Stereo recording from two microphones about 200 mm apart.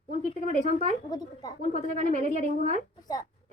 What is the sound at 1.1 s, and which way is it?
Speech, 20° left (ahead or behind).